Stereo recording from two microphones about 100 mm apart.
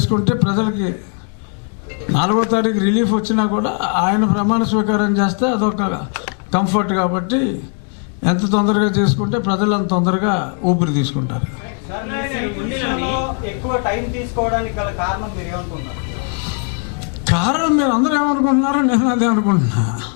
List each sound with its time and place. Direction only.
0.0 s a man's voice: 15° left (ahead or behind)
2.0 s a man's voice: 10° left (ahead or behind)
17.2 s a man's voice: 10° left (ahead or behind)